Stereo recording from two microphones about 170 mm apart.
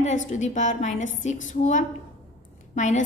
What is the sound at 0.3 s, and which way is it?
A woman's voice, 45° left (ahead or behind).